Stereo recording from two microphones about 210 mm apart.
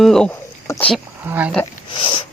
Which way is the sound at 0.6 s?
15° left (ahead or behind).